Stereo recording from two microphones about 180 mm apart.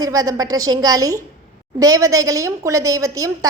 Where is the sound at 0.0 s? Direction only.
20° right (ahead or behind).